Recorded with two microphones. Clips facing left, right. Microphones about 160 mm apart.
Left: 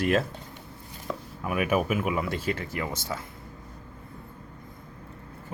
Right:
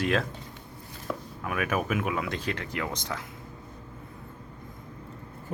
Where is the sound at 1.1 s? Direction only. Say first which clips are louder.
Left 2 dB; 5° left (ahead or behind).